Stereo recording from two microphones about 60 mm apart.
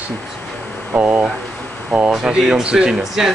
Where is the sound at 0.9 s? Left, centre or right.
Right.